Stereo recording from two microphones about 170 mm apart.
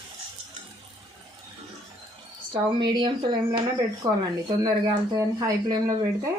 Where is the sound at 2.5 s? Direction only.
30° right (ahead or behind).